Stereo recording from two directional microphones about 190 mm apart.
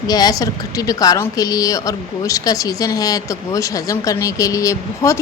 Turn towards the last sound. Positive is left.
turn(degrees=15)  # may be behind; listen again after turning